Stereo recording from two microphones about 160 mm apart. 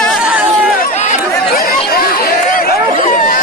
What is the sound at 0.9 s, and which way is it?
Chatter, 45° left (ahead or behind).